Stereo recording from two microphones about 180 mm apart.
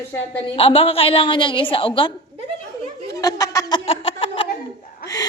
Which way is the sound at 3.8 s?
35° left (ahead or behind).